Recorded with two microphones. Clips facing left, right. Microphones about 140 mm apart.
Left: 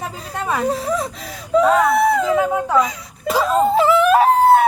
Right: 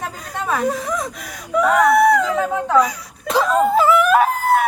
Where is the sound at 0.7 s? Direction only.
30° left (ahead or behind).